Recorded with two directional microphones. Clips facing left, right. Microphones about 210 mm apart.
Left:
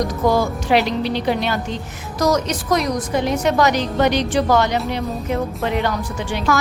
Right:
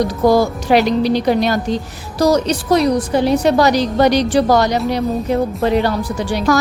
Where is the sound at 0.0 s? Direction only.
35° right (ahead or behind).